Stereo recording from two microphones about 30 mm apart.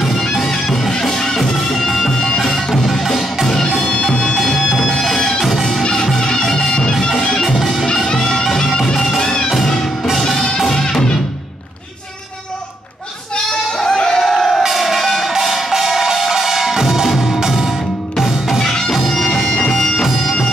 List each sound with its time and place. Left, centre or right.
0.2 s music: centre
4.2 s music: centre
6.1 s music: left
7.4 s music: centre
8.4 s music: left; by 10.5 s centre
10.9 s music: left
13.5 s goat: centre
14.3 s crowd: centre
14.7 s music: centre
15.3 s music: centre
18.1 s music: centre
18.6 s music: centre
19.0 s bagpipes: centre